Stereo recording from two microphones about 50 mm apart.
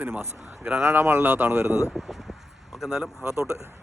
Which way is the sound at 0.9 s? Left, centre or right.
Right.